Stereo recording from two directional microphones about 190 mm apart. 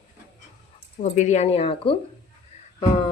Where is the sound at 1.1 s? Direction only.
35° left (ahead or behind).